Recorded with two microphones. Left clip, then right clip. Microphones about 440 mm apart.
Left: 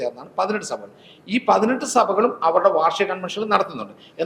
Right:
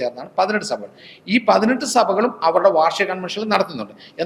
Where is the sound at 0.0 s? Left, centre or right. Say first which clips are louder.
Right 4 dB; right.